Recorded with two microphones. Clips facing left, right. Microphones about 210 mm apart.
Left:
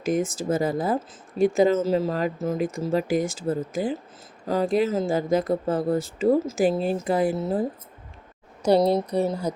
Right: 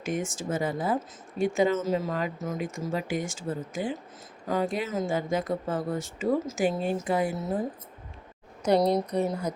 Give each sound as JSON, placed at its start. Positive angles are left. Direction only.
{"t": 0.0, "sound": "speech", "side_deg": 35}
{"t": 8.6, "sound": "speech", "side_deg": 30}